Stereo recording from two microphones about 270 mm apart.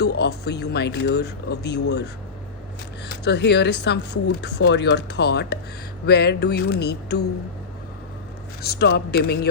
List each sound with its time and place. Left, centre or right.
0.0 s speech: left
3.1 s speech: left
8.6 s speech: left